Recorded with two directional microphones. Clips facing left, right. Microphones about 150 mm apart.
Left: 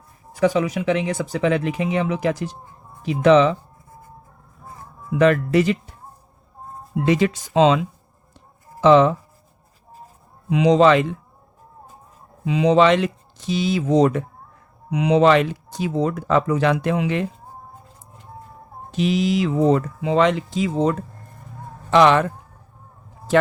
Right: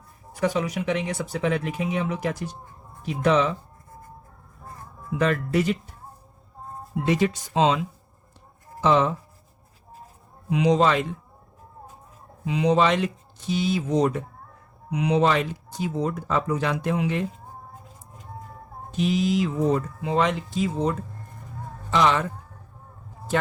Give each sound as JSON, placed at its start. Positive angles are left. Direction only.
{"t": 0.3, "sound": "speech", "side_deg": 90}
{"t": 5.1, "sound": "speech", "side_deg": 90}
{"t": 7.0, "sound": "speech", "side_deg": 90}
{"t": 8.8, "sound": "speech", "side_deg": 90}
{"t": 10.5, "sound": "speech", "side_deg": 90}
{"t": 12.5, "sound": "speech", "side_deg": 90}
{"t": 18.9, "sound": "speech", "side_deg": 90}
{"t": 21.8, "sound": "speech", "side_deg": 70}